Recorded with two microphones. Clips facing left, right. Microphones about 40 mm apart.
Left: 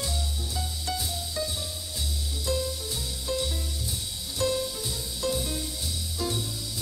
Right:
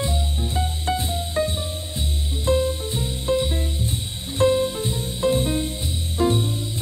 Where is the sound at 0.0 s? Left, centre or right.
Right.